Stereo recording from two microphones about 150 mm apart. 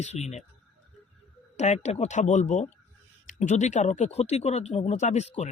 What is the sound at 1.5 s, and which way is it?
Speech, 50° left (ahead or behind).